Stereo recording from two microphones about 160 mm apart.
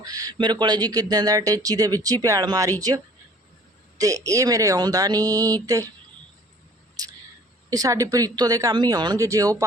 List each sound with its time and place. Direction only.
0.0 s speech: 20° right (ahead or behind)
3.9 s speech: 20° right (ahead or behind)
7.0 s camera: 25° right (ahead or behind)
7.7 s speech: 20° right (ahead or behind)